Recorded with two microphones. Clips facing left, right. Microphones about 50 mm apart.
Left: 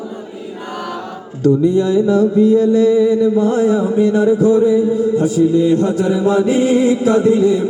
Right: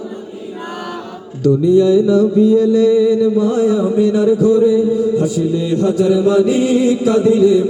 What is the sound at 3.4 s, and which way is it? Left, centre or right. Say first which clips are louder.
Chant: even; left.